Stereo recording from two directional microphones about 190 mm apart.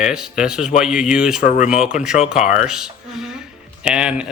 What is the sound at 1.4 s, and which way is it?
Speech, 40° left (ahead or behind).